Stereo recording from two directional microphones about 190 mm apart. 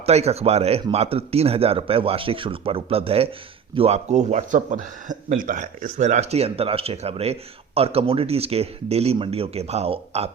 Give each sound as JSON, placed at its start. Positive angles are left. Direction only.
{"t": 0.0, "sound": "speech", "side_deg": -35}